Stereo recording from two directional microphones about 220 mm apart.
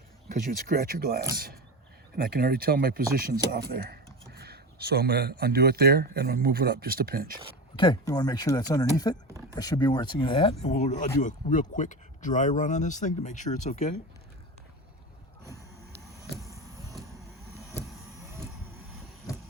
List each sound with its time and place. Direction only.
0.3 s speech: 40° right (ahead or behind)
7.8 s speech: 20° left (ahead or behind)
16.1 s a sound: 15° right (ahead or behind)